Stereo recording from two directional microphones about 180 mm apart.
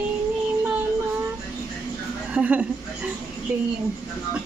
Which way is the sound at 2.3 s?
10° right (ahead or behind).